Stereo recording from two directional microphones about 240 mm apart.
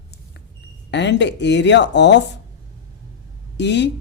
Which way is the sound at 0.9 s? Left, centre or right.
Left.